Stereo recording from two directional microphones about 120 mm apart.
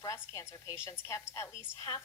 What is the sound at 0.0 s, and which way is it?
Speech, 25° left (ahead or behind).